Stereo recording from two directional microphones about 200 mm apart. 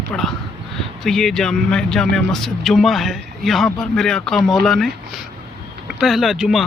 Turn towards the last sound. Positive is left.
turn(degrees=0)  # may be behind; listen again after turning